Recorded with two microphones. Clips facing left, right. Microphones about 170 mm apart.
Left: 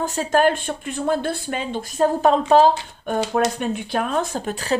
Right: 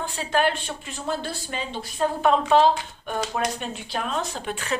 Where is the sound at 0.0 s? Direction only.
45° left (ahead or behind).